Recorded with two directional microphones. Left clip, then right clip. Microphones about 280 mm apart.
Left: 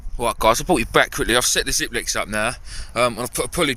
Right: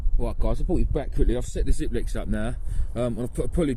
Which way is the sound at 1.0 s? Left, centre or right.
Centre.